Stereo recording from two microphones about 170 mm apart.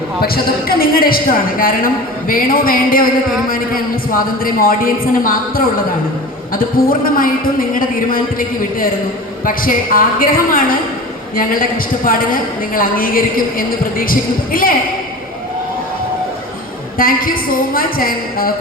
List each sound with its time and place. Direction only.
0.2 s a woman's voice: 60° left (ahead or behind)
17.0 s a woman's voice: 55° left (ahead or behind)